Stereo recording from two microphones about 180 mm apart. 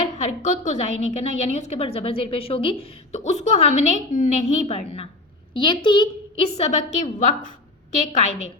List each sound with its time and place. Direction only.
0.2 s a woman's voice: 40° left (ahead or behind)
5.5 s a woman's voice: 25° left (ahead or behind)